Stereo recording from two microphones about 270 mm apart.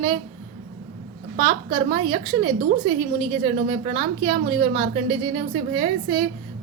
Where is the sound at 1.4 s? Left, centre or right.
Centre.